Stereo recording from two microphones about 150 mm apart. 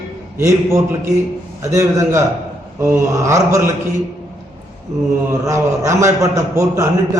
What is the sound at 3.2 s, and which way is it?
Speech, 20° right (ahead or behind).